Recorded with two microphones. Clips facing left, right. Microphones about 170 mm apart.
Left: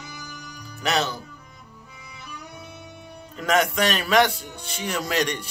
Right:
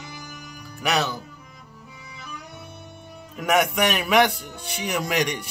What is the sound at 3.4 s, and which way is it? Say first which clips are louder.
Speech: right 1 dB; 15° right (ahead or behind).